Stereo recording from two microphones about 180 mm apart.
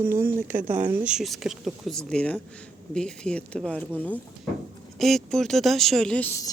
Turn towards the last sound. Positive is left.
turn(degrees=15)  # may be behind; listen again after turning